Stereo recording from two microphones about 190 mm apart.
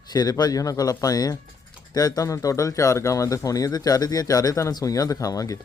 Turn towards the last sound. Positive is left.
turn(degrees=20)  # may be behind; listen again after turning